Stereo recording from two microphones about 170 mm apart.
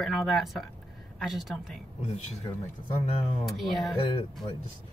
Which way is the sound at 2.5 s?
20° left (ahead or behind).